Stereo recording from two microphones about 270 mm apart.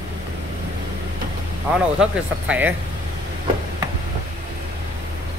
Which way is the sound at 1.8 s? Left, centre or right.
Centre.